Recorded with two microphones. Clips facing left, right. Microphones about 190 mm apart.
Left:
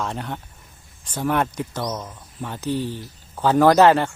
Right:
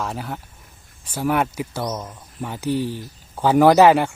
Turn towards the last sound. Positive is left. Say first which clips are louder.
# right 1 dB
turn(degrees=-10)  # may be behind; listen again after turning